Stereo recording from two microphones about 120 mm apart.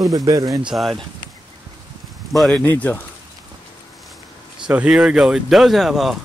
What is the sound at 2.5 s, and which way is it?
Speech, 15° left (ahead or behind).